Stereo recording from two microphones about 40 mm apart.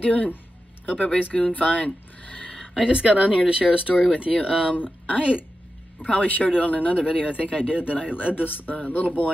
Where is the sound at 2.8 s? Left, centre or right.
Right.